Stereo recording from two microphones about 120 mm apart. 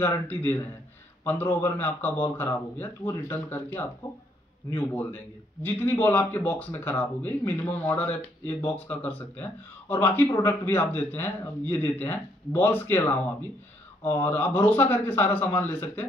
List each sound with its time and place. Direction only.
0.0 s a man's voice: 15° left (ahead or behind)